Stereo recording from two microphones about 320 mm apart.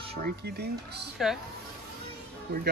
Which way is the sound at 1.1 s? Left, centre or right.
Centre.